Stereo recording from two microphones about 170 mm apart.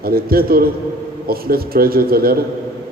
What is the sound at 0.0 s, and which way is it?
A man's voice, 60° right (ahead or behind).